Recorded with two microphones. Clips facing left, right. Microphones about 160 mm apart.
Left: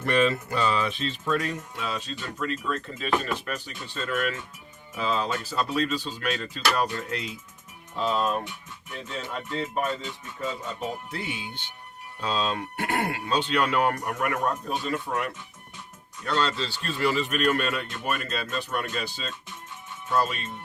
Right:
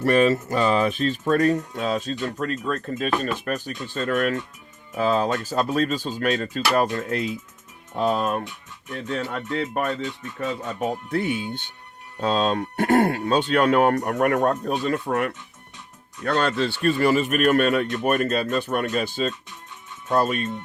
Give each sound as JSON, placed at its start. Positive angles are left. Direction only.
{"t": 0.0, "sound": "speech", "side_deg": -45}